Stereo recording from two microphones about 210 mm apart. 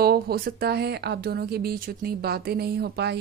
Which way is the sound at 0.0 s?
45° right (ahead or behind).